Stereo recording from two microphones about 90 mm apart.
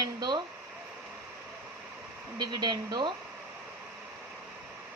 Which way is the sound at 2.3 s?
50° right (ahead or behind).